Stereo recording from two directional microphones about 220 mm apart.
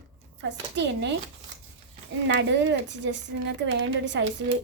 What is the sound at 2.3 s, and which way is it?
A woman's voice, 55° right (ahead or behind).